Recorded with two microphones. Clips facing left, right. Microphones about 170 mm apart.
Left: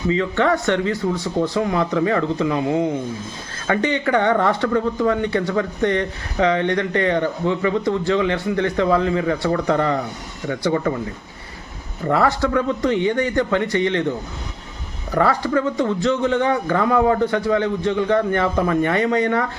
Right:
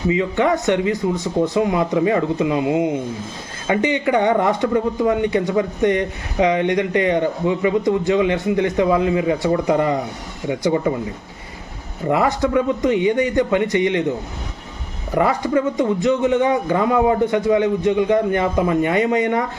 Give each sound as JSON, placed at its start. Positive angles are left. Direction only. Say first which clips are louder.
{"t": 0.1, "sound": "speech", "louder": "right 1 dB", "side_deg": -15}
{"t": 12.0, "sound": "speech", "louder": "right 1 dB", "side_deg": -20}
{"t": 15.1, "sound": "speech", "louder": "right 1 dB", "side_deg": -20}